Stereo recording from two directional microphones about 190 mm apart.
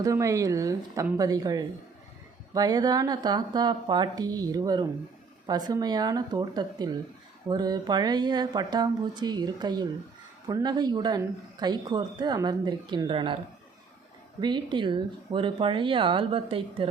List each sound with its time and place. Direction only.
0.0 s speech: 15° right (ahead or behind)
14.4 s speech: 25° right (ahead or behind)